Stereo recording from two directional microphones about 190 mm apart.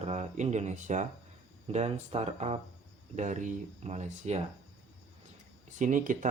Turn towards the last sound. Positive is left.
turn(degrees=-40)  # may be behind; listen again after turning